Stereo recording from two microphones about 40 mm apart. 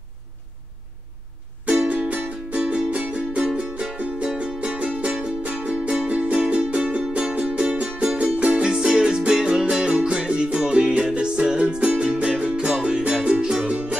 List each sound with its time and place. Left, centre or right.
1.9 s music: right
2.6 s music: right
7.5 s music: right
8.7 s music: right
13.7 s music: right